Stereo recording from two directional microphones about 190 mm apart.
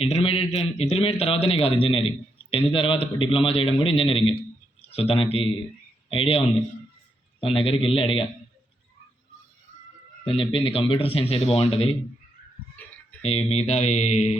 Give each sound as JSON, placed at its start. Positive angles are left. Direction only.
{"t": 0.0, "sound": "a man's voice", "side_deg": 30}
{"t": 7.4, "sound": "a man's voice", "side_deg": 30}
{"t": 10.2, "sound": "a man's voice", "side_deg": 30}
{"t": 12.8, "sound": "a sound", "side_deg": 10}
{"t": 13.2, "sound": "speech", "side_deg": 35}